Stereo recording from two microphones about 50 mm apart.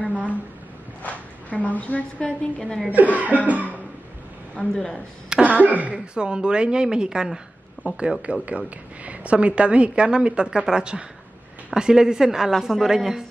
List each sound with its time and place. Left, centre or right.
0.0 s a sound: left
1.5 s a woman's voice: left
2.2 s a woman's voice: centre
2.9 s cough: right
4.7 s a woman's voice: centre
5.4 s cough: right
5.9 s a woman's voice: centre